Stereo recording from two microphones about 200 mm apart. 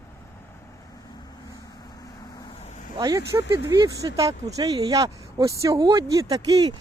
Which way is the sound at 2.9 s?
20° right (ahead or behind).